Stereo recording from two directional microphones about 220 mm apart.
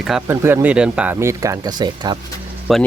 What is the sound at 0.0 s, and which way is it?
Speech, 5° right (ahead or behind).